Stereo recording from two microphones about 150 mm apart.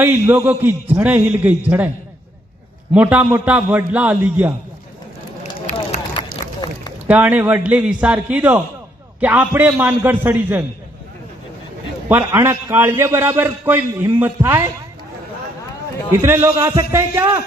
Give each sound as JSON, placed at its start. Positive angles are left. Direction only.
{"t": 0.0, "sound": "a man's voice", "side_deg": -15}
{"t": 2.9, "sound": "a man's voice", "side_deg": -10}
{"t": 5.6, "sound": "run", "side_deg": 45}
{"t": 7.1, "sound": "a man's voice", "side_deg": -10}
{"t": 12.0, "sound": "a man's voice", "side_deg": -15}
{"t": 16.2, "sound": "a man's voice", "side_deg": -20}